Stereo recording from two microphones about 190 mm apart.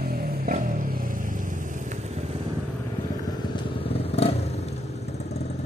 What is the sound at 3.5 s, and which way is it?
Motorcycle, 30° left (ahead or behind).